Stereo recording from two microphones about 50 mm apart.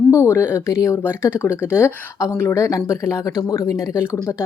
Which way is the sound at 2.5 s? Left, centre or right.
Left.